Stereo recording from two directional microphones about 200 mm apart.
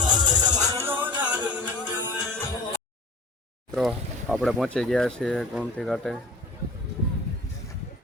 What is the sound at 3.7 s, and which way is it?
Speech, centre (ahead or behind).